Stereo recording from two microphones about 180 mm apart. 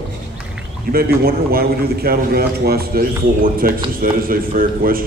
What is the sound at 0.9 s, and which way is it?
A man's voice, 55° right (ahead or behind).